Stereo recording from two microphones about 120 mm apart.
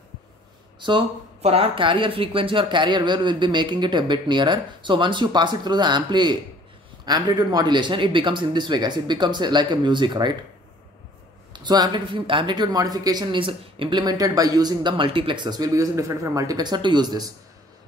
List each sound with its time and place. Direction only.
0.7 s speech: 40° right (ahead or behind)
1.4 s speech: 55° right (ahead or behind)
11.5 s speech: 35° right (ahead or behind)